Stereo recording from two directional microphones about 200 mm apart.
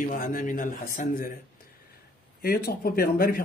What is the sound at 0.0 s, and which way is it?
A man's voice, 45° left (ahead or behind).